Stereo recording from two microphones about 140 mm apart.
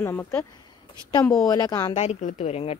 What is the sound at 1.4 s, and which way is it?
Speech, 25° left (ahead or behind).